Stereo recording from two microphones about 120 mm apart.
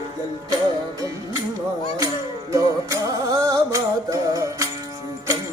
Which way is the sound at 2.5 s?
30° right (ahead or behind).